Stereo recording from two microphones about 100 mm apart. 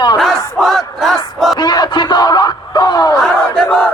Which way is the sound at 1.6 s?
45° left (ahead or behind).